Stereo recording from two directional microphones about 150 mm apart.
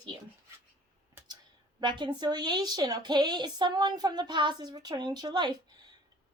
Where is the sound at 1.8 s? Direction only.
30° right (ahead or behind).